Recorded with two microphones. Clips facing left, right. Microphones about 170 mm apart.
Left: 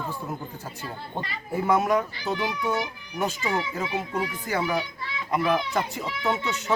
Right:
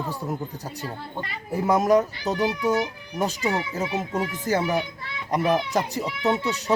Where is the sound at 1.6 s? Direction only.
40° right (ahead or behind).